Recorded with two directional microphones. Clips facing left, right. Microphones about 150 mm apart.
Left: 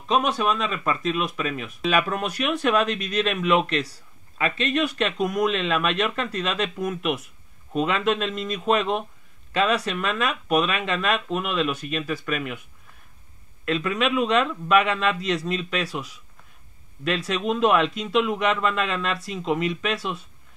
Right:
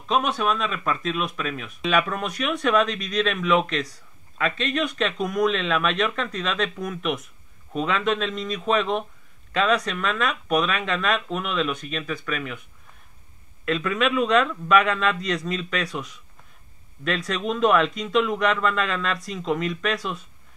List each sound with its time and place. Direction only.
0.1 s speech: centre (ahead or behind)
13.7 s speech: centre (ahead or behind)